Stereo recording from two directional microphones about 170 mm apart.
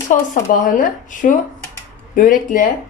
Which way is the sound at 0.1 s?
50° left (ahead or behind).